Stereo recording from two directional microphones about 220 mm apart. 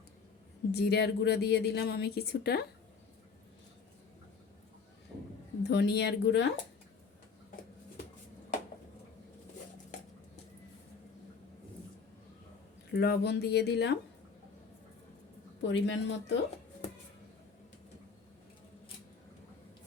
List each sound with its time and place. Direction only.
0.7 s a woman's voice: 50° left (ahead or behind)
5.6 s a woman's voice: 50° left (ahead or behind)
12.9 s a woman's voice: 50° left (ahead or behind)
15.6 s a woman's voice: 55° left (ahead or behind)